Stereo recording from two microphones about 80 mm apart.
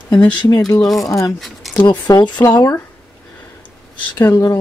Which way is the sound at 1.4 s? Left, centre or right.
Centre.